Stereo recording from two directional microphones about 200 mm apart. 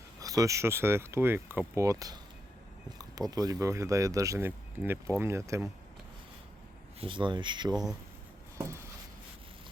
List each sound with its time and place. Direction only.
0.2 s speech: 15° right (ahead or behind)
7.0 s speech: 25° right (ahead or behind)
7.7 s speech: centre (ahead or behind)
8.5 s a sound: 15° right (ahead or behind)